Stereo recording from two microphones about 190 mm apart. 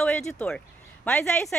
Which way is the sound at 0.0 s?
5° left (ahead or behind).